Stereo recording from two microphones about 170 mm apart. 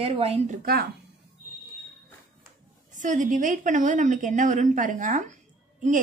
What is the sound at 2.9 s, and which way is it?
A woman's voice, 45° right (ahead or behind).